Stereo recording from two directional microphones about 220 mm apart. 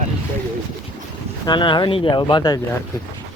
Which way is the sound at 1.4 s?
20° left (ahead or behind).